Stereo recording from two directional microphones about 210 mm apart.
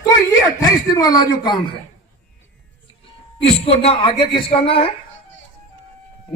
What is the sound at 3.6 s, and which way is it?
Speech, 30° left (ahead or behind).